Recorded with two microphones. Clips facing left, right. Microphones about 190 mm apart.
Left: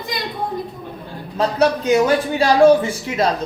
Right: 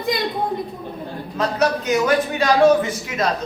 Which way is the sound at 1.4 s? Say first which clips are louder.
Left 3 dB; 30° left (ahead or behind).